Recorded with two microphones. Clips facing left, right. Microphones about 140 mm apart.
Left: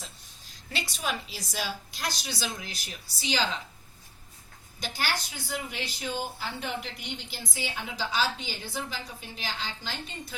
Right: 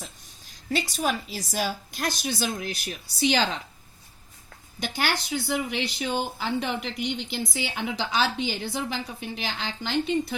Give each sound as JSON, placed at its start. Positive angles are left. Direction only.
{"t": 0.7, "sound": "a woman's voice", "side_deg": -45}
{"t": 4.8, "sound": "speech", "side_deg": -70}